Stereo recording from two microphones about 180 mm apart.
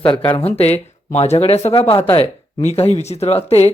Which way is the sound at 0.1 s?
30° left (ahead or behind).